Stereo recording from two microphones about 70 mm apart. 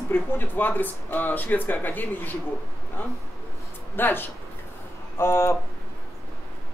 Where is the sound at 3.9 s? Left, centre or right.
Left.